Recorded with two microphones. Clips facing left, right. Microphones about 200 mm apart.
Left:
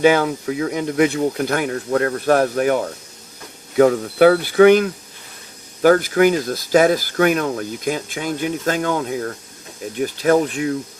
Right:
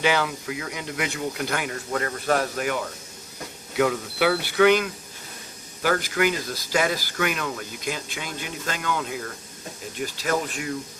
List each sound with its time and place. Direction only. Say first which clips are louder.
0.0 s speech: left 9 dB; 50° left (ahead or behind)